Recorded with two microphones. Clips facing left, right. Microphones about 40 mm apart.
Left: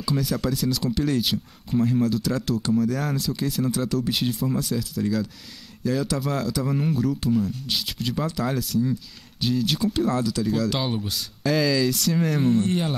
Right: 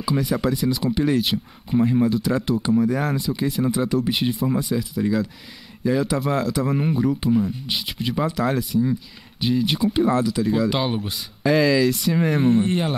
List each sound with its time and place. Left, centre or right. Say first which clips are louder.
0.0 s speech: right 3 dB; centre